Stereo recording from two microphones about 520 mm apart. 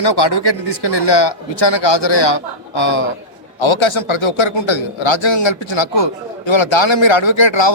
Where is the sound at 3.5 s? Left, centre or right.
Left.